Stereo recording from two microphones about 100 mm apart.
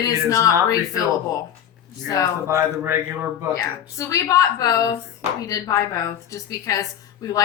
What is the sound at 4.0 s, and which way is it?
A woman's voice, 35° left (ahead or behind).